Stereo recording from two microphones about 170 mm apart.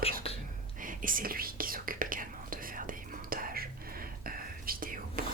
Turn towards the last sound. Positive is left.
turn(degrees=-55)  # may be behind; listen again after turning